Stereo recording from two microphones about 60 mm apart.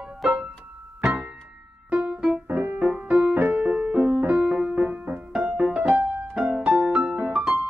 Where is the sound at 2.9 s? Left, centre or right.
Centre.